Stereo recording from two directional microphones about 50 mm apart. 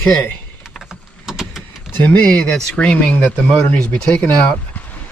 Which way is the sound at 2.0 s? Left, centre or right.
Left.